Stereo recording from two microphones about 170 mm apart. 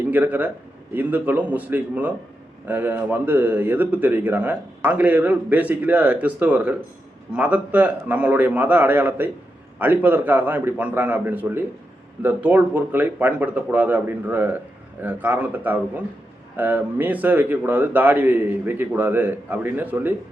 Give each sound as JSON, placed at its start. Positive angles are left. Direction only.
{"t": 0.0, "sound": "a man's voice", "side_deg": -10}